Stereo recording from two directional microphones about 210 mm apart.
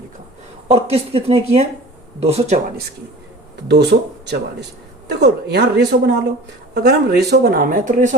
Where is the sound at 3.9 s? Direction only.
55° right (ahead or behind); by 8.1 s 40° right (ahead or behind).